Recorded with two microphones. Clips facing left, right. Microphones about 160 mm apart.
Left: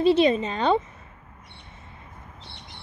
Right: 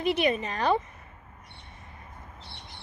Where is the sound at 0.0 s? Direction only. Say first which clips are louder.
Left 7 dB; 30° left (ahead or behind).